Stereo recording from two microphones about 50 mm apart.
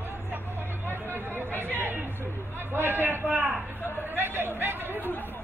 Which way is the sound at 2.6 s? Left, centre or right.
Right.